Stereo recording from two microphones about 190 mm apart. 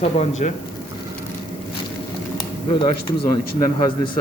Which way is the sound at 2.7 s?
25° left (ahead or behind).